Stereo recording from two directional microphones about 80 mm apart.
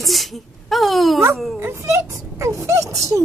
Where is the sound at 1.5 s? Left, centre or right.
Right.